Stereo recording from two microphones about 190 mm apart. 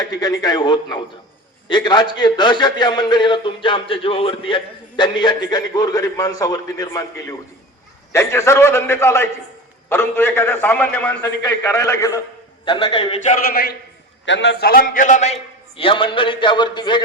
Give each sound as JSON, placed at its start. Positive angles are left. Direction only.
{"t": 0.0, "sound": "a man's voice", "side_deg": 20}
{"t": 12.6, "sound": "a man's voice", "side_deg": 25}
{"t": 13.5, "sound": "a man's voice", "side_deg": 55}
{"t": 14.3, "sound": "a man's voice", "side_deg": 65}
{"t": 15.8, "sound": "a man's voice", "side_deg": 25}